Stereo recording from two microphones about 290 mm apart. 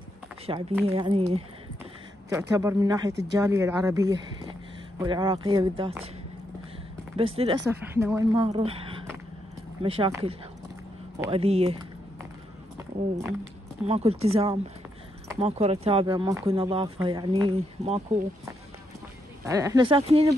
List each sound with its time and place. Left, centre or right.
0.5 s speech: centre
7.2 s speech: centre
13.8 s speech: right
19.4 s speech: centre